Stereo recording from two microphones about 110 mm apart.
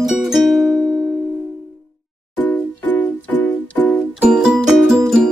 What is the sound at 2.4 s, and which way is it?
Music, 15° left (ahead or behind).